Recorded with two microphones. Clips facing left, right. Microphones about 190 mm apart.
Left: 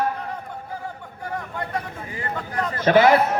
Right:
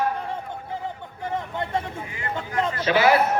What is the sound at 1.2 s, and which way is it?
Vehicle, 25° right (ahead or behind).